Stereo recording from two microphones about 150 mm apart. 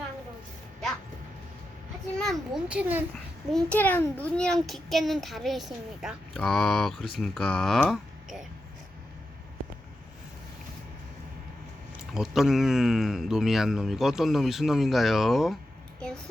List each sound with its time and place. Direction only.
2.1 s speech: centre (ahead or behind)
3.5 s a child's voice: 10° left (ahead or behind)
12.1 s speech: 5° right (ahead or behind)
16.0 s a sound: 5° left (ahead or behind)